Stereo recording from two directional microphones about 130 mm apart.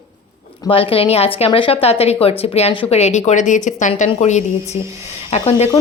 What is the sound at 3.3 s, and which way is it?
A woman's voice, 70° left (ahead or behind).